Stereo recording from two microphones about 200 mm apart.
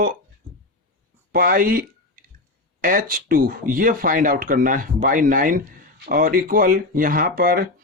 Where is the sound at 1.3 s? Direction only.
45° right (ahead or behind).